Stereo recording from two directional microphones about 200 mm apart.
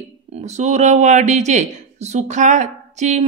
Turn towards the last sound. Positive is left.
turn(degrees=-35)  # may be behind; listen again after turning